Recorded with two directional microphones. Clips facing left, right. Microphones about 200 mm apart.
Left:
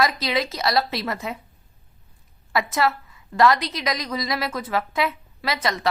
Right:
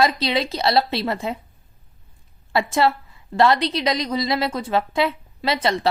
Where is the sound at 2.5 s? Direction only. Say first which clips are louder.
Right 3 dB; 30° right (ahead or behind).